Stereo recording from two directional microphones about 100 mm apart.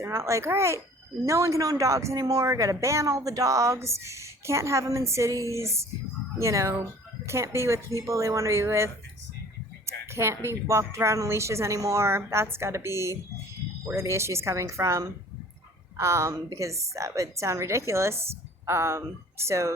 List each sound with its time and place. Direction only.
0.0 s a woman's voice: 30° right (ahead or behind)